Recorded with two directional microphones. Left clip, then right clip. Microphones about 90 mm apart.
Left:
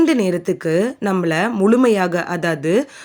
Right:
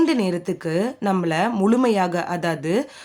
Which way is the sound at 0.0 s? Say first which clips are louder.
Left 4 dB; 35° left (ahead or behind).